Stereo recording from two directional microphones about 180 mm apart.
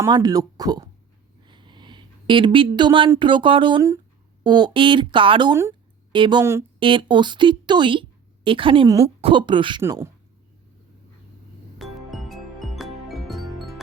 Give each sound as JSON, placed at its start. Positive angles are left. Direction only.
{"t": 0.0, "sound": "a woman's voice", "side_deg": -20}
{"t": 1.5, "sound": "a sound", "side_deg": -25}
{"t": 3.1, "sound": "a woman's voice", "side_deg": -25}
{"t": 6.4, "sound": "speech", "side_deg": -15}
{"t": 6.7, "sound": "a woman's voice", "side_deg": -30}
{"t": 9.8, "sound": "speech", "side_deg": -15}
{"t": 11.8, "sound": "music", "side_deg": 0}